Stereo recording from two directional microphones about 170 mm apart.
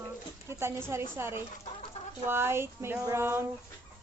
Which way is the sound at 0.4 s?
15° right (ahead or behind).